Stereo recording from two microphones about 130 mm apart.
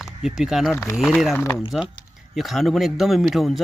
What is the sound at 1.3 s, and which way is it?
Speech, 20° left (ahead or behind).